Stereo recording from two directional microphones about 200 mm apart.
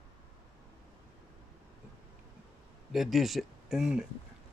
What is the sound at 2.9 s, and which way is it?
Speech, centre (ahead or behind).